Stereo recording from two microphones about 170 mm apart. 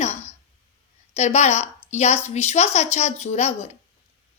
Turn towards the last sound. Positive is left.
turn(degrees=40)  # may be behind; listen again after turning